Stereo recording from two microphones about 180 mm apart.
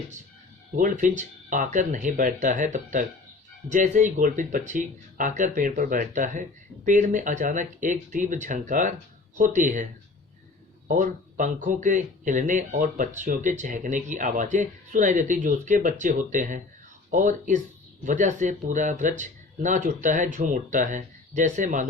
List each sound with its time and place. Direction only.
0.8 s speech: 45° right (ahead or behind)
10.8 s speech: 45° right (ahead or behind)